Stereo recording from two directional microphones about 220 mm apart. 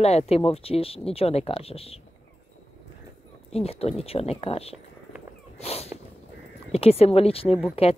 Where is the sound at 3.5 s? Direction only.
25° left (ahead or behind).